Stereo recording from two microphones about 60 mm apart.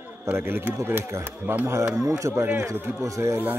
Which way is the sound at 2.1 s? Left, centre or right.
Right.